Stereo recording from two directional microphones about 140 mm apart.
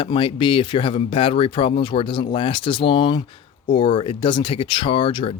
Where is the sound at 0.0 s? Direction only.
40° left (ahead or behind).